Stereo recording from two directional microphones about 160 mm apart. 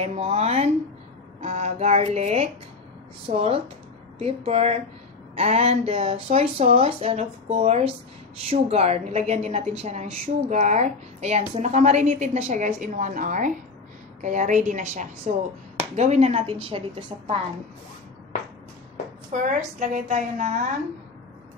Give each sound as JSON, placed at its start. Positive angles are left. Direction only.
{"t": 0.0, "sound": "a woman's voice", "side_deg": -40}
{"t": 19.3, "sound": "a woman's voice", "side_deg": -55}